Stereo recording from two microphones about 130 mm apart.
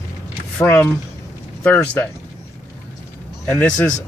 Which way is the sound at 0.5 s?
20° left (ahead or behind).